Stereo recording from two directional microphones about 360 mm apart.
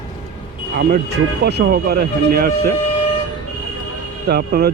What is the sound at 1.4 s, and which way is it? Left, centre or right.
A man's voice, right.